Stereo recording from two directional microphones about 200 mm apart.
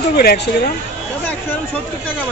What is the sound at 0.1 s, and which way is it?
Speech, 50° left (ahead or behind).